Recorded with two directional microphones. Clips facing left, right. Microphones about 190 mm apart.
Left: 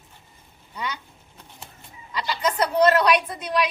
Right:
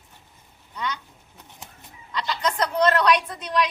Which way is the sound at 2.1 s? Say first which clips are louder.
Left 1 dB; 5° left (ahead or behind).